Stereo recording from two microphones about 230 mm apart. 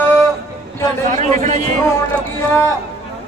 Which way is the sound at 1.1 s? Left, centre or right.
Right.